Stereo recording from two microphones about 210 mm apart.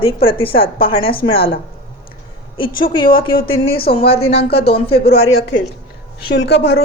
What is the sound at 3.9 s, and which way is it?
Speech, 25° left (ahead or behind).